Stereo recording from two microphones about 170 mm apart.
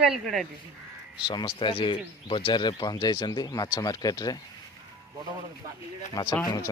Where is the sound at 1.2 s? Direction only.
25° left (ahead or behind).